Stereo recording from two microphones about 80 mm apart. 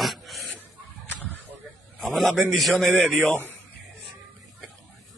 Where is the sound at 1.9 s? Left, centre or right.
Centre.